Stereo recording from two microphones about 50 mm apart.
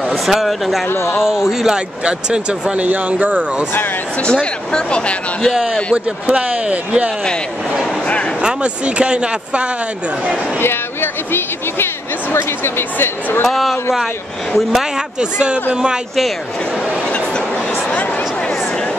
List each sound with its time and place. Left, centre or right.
0.2 s speech: centre
0.8 s speech: left
1.2 s a man's voice: centre
2.0 s speech: centre
4.2 s speech: centre
5.9 s speech: right
8.4 s speech: right
10.6 s a sound: left
12.6 s a woman's voice: left
13.4 s speech: centre
14.7 s a man's voice: centre